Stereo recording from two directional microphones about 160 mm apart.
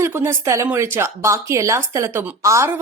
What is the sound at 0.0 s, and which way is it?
A woman's voice, 15° right (ahead or behind).